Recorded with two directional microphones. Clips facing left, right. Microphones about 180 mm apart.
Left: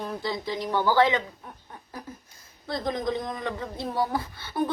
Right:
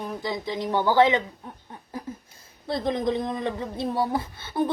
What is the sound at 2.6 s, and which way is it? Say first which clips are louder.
Speech: right 3 dB; 25° right (ahead or behind).